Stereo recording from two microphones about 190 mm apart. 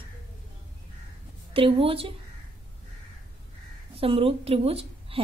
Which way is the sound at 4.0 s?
30° right (ahead or behind).